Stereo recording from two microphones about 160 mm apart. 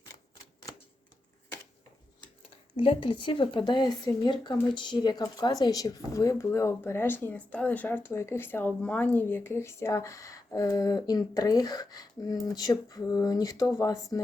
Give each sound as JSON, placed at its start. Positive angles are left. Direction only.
{"t": 2.7, "sound": "speech", "side_deg": 35}